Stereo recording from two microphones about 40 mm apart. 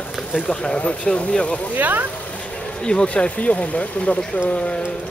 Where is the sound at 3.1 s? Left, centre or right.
Left.